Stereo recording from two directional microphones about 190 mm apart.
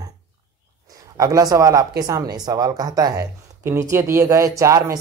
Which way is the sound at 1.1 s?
20° right (ahead or behind).